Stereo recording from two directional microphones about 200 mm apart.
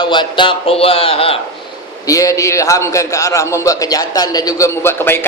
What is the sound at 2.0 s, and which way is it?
A man's voice, 15° left (ahead or behind).